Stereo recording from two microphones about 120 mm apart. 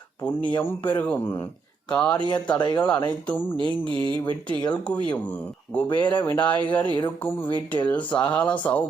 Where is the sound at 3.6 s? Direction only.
45° right (ahead or behind).